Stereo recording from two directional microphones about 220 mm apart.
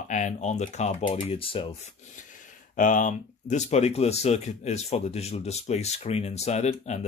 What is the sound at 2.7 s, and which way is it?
Speech, 35° left (ahead or behind).